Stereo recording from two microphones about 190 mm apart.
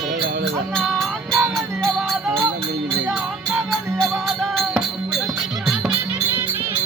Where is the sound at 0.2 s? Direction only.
65° right (ahead or behind).